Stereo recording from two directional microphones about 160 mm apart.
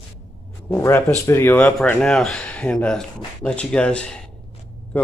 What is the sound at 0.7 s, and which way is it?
A man's voice, 15° left (ahead or behind).